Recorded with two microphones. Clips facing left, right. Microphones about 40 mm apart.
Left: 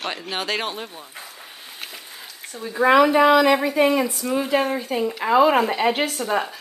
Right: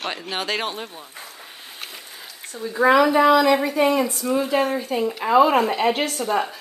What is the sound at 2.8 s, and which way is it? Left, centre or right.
Speech, centre.